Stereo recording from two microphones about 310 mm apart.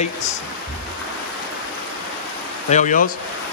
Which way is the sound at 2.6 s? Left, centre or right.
Left.